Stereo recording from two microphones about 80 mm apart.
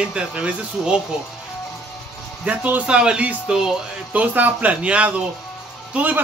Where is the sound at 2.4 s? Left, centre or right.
Centre.